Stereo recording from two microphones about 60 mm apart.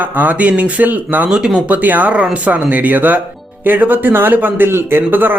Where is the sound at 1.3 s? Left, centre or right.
Centre.